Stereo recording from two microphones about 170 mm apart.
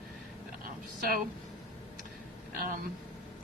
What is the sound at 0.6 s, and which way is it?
Speech, 55° right (ahead or behind).